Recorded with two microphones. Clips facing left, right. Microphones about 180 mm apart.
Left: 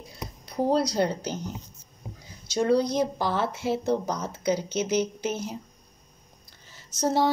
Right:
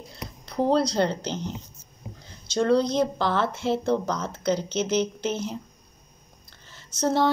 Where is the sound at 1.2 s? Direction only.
25° right (ahead or behind).